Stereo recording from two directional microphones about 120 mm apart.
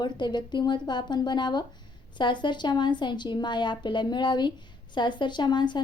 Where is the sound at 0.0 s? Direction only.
35° left (ahead or behind).